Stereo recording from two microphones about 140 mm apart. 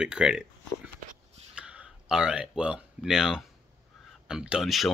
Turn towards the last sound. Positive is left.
turn(degrees=0)  # may be behind; listen again after turning